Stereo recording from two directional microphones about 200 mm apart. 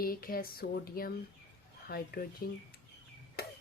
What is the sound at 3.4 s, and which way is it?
Chop, 50° left (ahead or behind).